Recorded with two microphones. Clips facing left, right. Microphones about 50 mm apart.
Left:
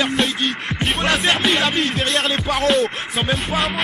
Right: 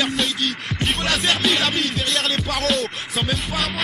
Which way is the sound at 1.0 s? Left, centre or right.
Centre.